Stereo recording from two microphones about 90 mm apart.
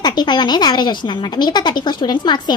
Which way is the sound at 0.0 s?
55° left (ahead or behind).